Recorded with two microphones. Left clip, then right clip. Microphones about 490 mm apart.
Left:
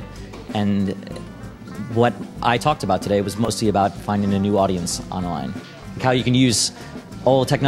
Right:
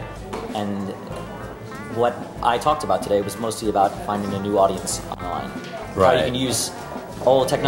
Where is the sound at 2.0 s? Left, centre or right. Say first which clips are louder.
Even; left.